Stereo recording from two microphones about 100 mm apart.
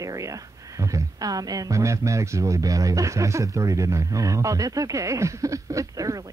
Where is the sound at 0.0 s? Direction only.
35° right (ahead or behind).